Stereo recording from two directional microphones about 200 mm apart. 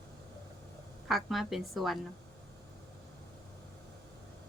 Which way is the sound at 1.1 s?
Centre (ahead or behind).